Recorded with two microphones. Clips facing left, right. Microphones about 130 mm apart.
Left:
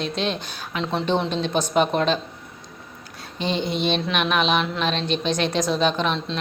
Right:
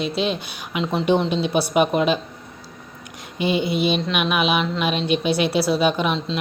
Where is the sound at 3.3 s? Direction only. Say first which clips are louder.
Right 4 dB; 10° right (ahead or behind).